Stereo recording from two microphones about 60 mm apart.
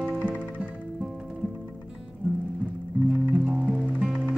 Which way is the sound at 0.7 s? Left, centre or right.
Centre.